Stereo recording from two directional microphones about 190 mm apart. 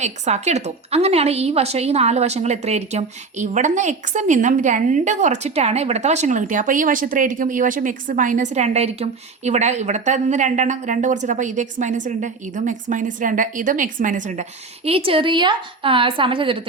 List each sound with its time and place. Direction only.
0.0 s a woman's voice: 35° right (ahead or behind)
14.8 s a woman's voice: 30° right (ahead or behind)